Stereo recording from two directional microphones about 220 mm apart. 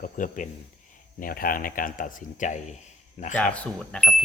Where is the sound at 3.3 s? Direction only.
5° left (ahead or behind).